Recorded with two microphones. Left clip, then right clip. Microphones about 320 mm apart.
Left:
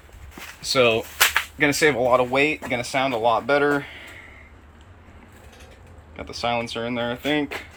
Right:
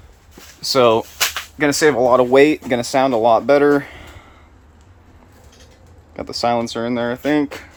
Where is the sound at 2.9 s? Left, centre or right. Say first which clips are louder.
Right 7 dB; right.